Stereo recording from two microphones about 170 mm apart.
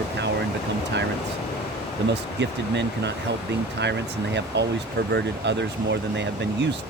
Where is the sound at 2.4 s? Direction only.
90° right.